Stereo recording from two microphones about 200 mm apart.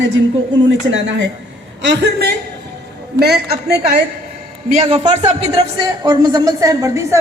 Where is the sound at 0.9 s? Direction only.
65° right (ahead or behind).